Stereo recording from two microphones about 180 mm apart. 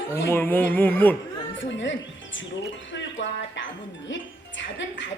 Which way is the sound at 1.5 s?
90° left.